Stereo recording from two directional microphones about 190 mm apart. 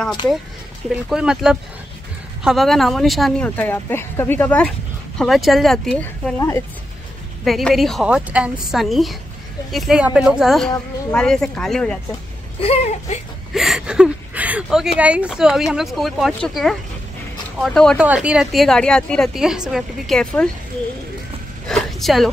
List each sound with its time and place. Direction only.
1.1 s a woman's voice: 5° right (ahead or behind)
7.4 s a woman's voice: centre (ahead or behind)
12.5 s speech: 35° left (ahead or behind)
13.5 s a woman's voice: centre (ahead or behind)
21.6 s a sound: centre (ahead or behind)